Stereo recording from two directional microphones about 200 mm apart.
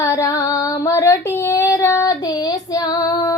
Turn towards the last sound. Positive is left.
turn(degrees=20)  # may be behind; listen again after turning